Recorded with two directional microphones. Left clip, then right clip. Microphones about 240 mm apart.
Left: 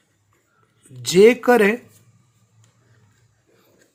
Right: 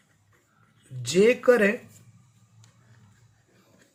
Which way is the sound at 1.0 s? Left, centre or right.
Left.